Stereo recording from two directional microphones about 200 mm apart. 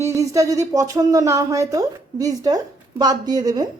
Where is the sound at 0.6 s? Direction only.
15° right (ahead or behind).